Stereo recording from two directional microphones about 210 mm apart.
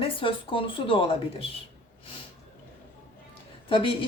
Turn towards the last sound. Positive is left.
turn(degrees=25)  # may be behind; listen again after turning